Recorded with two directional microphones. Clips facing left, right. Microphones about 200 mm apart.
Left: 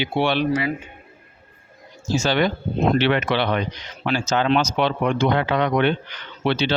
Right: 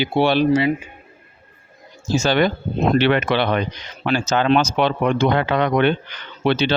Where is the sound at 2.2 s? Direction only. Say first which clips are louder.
Right 3 dB; 50° right (ahead or behind).